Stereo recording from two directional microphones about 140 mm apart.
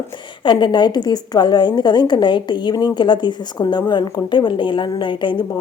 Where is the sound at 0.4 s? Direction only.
35° left (ahead or behind).